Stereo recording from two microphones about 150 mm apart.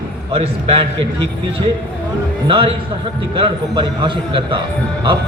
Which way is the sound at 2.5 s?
35° right (ahead or behind).